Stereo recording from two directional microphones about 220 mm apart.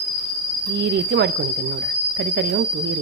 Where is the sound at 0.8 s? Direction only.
50° right (ahead or behind).